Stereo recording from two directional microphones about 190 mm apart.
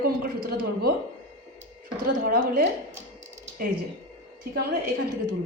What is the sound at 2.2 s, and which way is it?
Speech, 50° right (ahead or behind).